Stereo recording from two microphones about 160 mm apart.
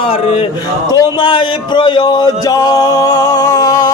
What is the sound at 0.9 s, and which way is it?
Music, 30° left (ahead or behind).